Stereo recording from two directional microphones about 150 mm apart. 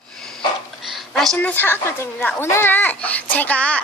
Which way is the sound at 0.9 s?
Centre (ahead or behind).